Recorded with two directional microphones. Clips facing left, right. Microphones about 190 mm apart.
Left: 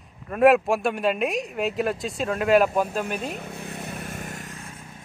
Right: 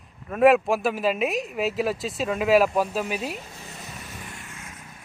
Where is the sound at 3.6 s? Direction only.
60° left (ahead or behind).